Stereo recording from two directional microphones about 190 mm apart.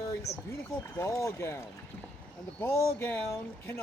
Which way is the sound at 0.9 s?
15° left (ahead or behind).